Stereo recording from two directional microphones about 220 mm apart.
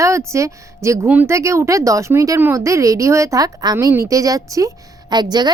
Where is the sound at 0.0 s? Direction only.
15° right (ahead or behind).